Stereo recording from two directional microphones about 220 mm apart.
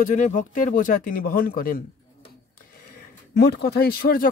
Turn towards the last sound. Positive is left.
turn(degrees=45)  # may be behind; listen again after turning